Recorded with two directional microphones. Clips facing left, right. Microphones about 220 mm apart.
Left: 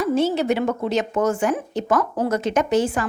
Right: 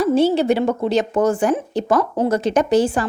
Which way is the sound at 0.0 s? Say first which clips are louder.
Right 4 dB; 35° right (ahead or behind).